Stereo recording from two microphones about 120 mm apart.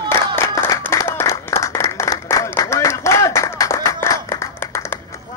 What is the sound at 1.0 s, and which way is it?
Applause, 20° left (ahead or behind).